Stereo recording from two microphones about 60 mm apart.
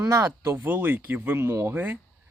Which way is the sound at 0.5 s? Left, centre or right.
Right.